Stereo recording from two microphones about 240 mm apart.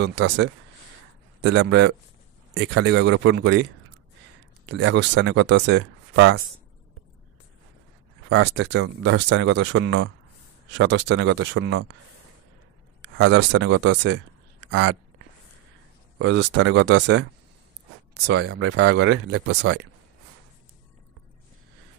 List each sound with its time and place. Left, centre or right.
0.0 s speech: right
4.6 s speech: right
8.3 s speech: right
13.0 s speech: right
16.2 s speech: right